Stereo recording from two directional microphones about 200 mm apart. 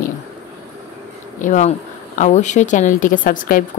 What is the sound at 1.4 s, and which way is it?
A woman's voice, 40° left (ahead or behind).